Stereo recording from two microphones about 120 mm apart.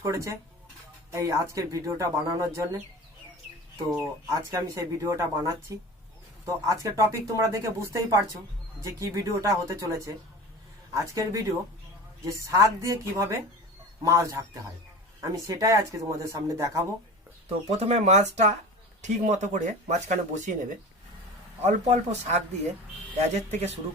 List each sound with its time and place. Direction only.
0.0 s speech: 25° right (ahead or behind)
3.9 s speech: 30° right (ahead or behind)
10.9 s speech: 25° right (ahead or behind)
17.7 s speech: 60° right (ahead or behind); by 20.6 s 90° right
21.6 s speech: 70° right (ahead or behind)
23.5 s speech: 70° right (ahead or behind)